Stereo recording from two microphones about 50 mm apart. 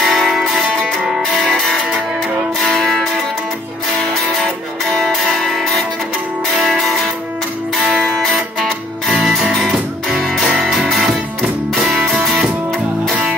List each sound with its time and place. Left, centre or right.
0.0 s music: centre
1.4 s music: left
4.9 s music: centre
8.2 s music: centre
9.4 s music: centre
12.1 s music: centre